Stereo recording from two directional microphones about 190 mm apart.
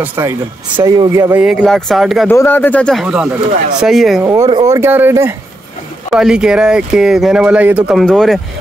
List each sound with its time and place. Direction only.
0.0 s speech: 10° right (ahead or behind)
1.3 s speech: 5° right (ahead or behind)
2.2 s speech: 10° left (ahead or behind)
4.2 s speech: 15° right (ahead or behind); by 8.4 s 5° left (ahead or behind)